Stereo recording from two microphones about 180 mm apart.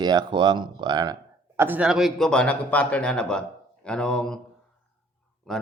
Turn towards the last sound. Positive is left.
turn(degrees=0)  # may be behind; listen again after turning